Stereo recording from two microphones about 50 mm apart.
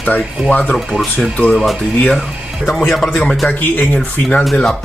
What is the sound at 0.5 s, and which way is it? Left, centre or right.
Speech, left.